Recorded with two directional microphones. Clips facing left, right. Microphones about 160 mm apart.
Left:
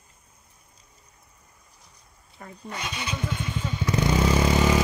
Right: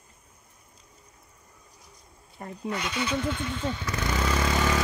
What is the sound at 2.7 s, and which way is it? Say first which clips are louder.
Vehicle: right 4 dB; 20° left (ahead or behind).